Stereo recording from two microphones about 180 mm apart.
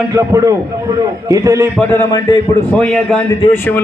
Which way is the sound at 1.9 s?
15° left (ahead or behind).